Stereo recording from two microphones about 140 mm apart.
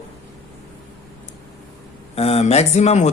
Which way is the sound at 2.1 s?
45° left (ahead or behind).